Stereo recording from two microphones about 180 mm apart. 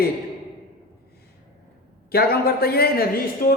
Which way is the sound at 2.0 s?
60° left (ahead or behind).